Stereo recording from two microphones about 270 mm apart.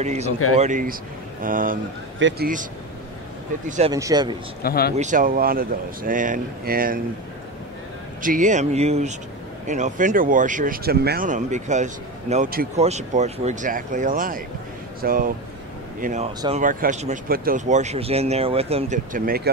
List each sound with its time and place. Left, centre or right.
0.0 s speech: right
3.6 s speech: right
3.9 s speech: centre
4.6 s speech: left
4.9 s speech: right
8.2 s speech: right